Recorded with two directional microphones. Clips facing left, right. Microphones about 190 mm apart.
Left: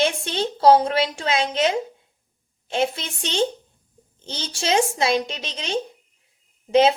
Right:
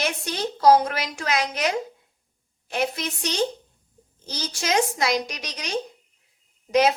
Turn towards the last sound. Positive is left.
turn(degrees=30)  # may be behind; listen again after turning